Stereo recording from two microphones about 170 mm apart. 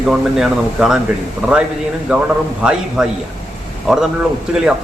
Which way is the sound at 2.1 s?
5° right (ahead or behind).